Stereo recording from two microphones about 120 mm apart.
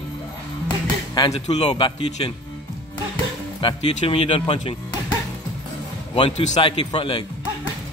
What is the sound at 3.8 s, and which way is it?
Speech, 55° left (ahead or behind).